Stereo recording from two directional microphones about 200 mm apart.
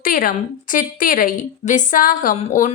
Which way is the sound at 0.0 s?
45° left (ahead or behind).